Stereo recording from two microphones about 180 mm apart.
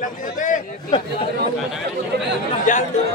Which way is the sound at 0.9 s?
25° left (ahead or behind).